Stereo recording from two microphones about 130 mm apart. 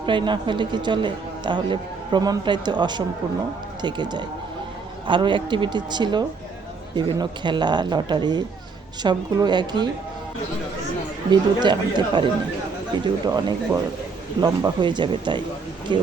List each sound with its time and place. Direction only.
0.0 s a man's voice: 40° right (ahead or behind)
11.3 s a man's voice: 35° right (ahead or behind)
14.4 s a man's voice: 35° right (ahead or behind)